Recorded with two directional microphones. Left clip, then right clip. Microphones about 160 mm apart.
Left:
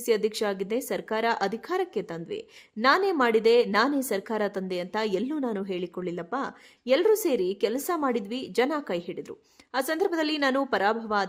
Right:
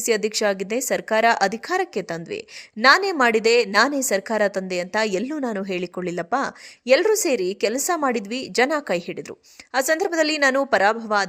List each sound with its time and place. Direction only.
0.0 s a woman's voice: 15° right (ahead or behind)